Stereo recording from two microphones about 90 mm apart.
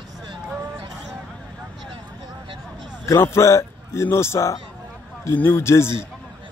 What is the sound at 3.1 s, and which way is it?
A man's voice, 35° left (ahead or behind).